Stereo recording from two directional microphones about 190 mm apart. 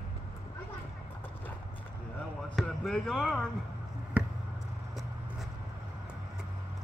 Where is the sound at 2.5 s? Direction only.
Centre (ahead or behind).